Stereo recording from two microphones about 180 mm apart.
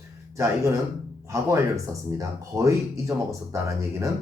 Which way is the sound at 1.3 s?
15° right (ahead or behind).